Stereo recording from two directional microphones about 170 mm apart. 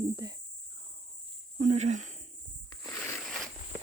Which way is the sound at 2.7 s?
15° left (ahead or behind).